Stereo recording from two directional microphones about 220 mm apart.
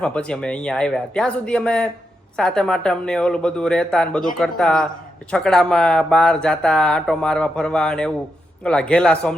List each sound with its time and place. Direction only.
0.0 s speech: 5° left (ahead or behind)